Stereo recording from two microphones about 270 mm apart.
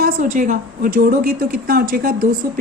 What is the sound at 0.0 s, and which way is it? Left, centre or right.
A woman's voice, right.